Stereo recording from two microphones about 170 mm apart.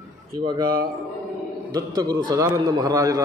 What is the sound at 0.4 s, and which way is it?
A man's voice, 25° right (ahead or behind).